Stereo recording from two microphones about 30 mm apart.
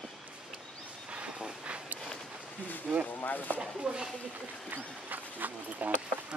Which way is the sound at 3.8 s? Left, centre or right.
Right.